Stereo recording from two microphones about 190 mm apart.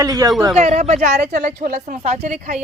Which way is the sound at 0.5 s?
35° right (ahead or behind).